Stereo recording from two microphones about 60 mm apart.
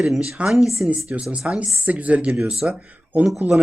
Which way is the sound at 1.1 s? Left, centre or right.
Right.